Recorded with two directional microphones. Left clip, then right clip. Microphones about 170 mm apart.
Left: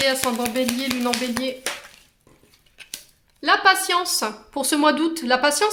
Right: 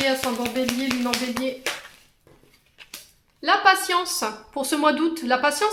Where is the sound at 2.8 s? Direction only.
25° left (ahead or behind).